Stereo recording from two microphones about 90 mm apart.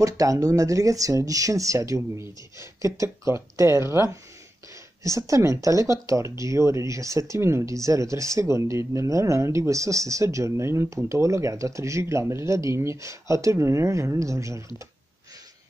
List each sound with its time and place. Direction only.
0.0 s speech: 40° right (ahead or behind)